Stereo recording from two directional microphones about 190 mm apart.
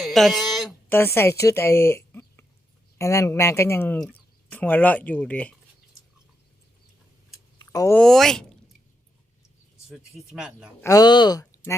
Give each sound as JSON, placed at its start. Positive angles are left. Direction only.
{"t": 0.0, "sound": "speech", "side_deg": 0}
{"t": 0.9, "sound": "speech", "side_deg": 10}
{"t": 7.6, "sound": "a sound", "side_deg": 20}
{"t": 7.9, "sound": "speech", "side_deg": 0}
{"t": 10.3, "sound": "speech", "side_deg": -5}
{"t": 10.8, "sound": "speech", "side_deg": 20}